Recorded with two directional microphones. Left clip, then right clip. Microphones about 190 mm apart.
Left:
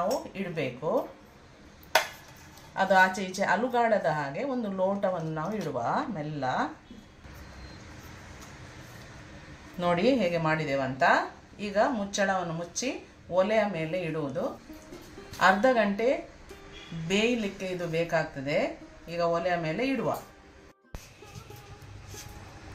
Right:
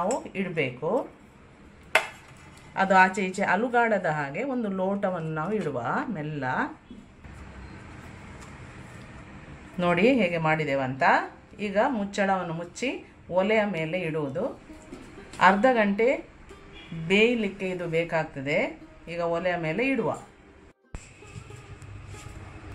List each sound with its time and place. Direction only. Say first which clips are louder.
0.3 s speech: right 4 dB; 20° right (ahead or behind)
2.7 s speech: right 2 dB; 15° right (ahead or behind)
9.8 s speech: right 3 dB; 20° right (ahead or behind)